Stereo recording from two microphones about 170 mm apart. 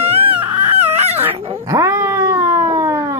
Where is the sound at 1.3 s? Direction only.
35° right (ahead or behind).